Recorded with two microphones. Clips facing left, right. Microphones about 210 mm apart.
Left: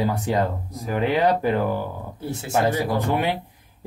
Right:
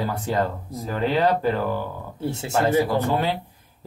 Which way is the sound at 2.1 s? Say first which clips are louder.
Right 4 dB; 25° right (ahead or behind).